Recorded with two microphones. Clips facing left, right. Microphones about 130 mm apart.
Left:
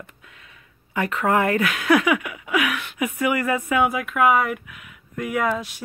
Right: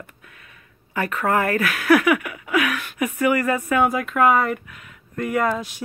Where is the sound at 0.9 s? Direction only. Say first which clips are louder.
Left 1 dB; 20° left (ahead or behind).